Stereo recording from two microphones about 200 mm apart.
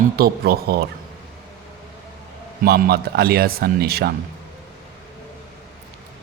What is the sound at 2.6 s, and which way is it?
Speech, 50° right (ahead or behind).